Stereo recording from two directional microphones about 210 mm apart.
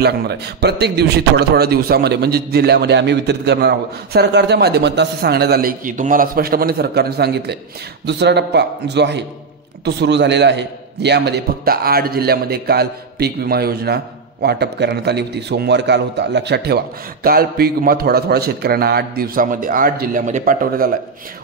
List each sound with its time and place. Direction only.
0.0 s a man's voice: 50° right (ahead or behind)